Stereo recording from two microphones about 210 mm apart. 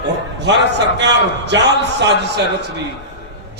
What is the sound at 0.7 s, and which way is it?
A man's voice, 55° right (ahead or behind).